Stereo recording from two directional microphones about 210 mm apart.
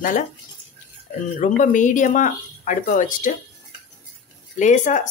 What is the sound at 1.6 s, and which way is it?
Speech, 35° left (ahead or behind).